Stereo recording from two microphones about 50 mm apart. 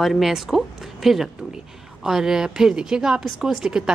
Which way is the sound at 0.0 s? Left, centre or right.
Centre.